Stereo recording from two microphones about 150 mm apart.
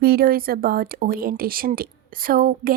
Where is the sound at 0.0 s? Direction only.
90° right.